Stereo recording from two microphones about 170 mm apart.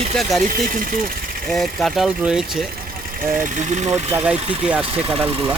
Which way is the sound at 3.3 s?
50° right (ahead or behind).